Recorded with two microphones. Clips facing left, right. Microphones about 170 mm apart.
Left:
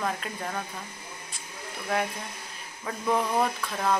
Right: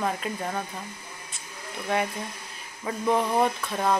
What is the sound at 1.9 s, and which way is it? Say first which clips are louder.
Speech: right 2 dB; centre (ahead or behind).